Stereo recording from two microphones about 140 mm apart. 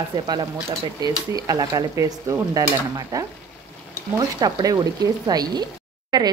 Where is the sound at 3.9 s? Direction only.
25° right (ahead or behind).